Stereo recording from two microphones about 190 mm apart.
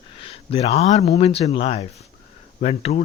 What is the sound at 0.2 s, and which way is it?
A man's voice, 30° left (ahead or behind).